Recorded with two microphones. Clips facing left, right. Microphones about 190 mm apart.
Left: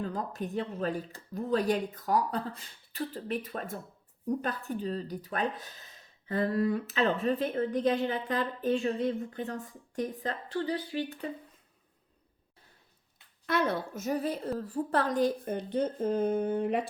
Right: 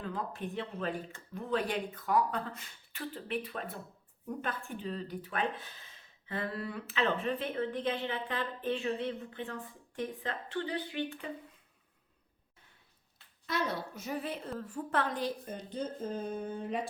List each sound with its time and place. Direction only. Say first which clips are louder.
0.0 s speech: left 4 dB; 40° left (ahead or behind)
13.5 s a woman's voice: left 5 dB; 55° left (ahead or behind); by 15.3 s 40° left (ahead or behind)
15.4 s speech: left 8 dB; 60° left (ahead or behind)